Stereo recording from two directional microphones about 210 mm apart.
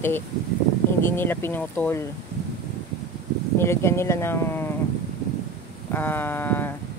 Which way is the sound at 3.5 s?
10° left (ahead or behind).